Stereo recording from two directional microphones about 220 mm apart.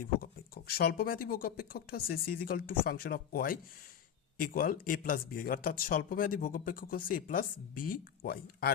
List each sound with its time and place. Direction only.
0.2 s speech: 45° left (ahead or behind)